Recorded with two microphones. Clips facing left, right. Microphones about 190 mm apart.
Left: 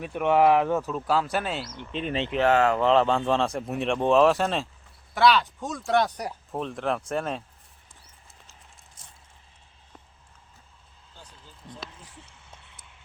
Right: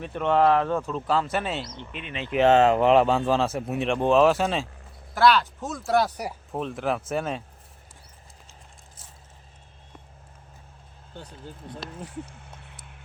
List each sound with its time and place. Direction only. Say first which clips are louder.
0.0 s speech: left 1 dB; 10° left (ahead or behind)
1.9 s speech: left 7 dB; 30° left (ahead or behind)
2.4 s speech: right 4 dB; 20° right (ahead or behind); by 7.4 s centre (ahead or behind)
11.1 s speech: right 10 dB; 60° right (ahead or behind)
11.9 s a sound: right 13 dB; 55° right (ahead or behind)